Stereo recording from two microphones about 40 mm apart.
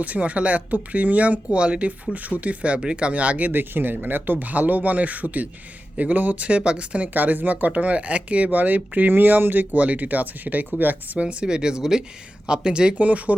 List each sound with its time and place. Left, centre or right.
0.0 s speech: right
2.1 s speech: right
3.5 s speech: right
7.1 s speech: right
8.4 s speech: right
9.7 s speech: right
11.2 s speech: right
11.4 s speech: centre
13.0 s speech: right